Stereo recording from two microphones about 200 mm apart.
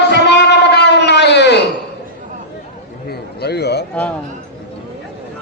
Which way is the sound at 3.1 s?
55° left (ahead or behind).